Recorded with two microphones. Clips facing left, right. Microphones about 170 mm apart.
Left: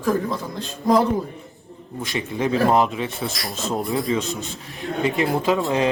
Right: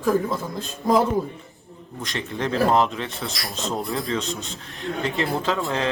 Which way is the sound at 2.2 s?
10° left (ahead or behind).